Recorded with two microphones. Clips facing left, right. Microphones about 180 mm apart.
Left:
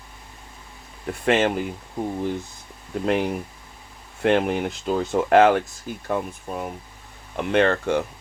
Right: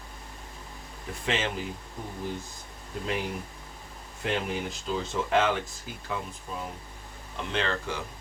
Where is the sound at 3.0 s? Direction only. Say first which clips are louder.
Left 9 dB; 60° left (ahead or behind).